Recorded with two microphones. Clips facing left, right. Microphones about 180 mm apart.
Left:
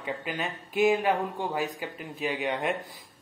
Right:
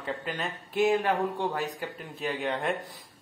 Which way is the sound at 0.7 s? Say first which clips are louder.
Left 1 dB; centre (ahead or behind).